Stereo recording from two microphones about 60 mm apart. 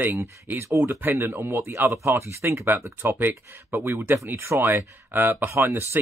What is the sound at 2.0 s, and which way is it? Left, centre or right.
Speech, right.